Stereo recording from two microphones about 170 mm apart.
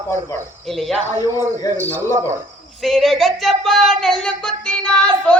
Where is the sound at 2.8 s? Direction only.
Centre (ahead or behind).